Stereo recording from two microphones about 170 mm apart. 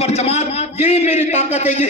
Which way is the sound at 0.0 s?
40° left (ahead or behind).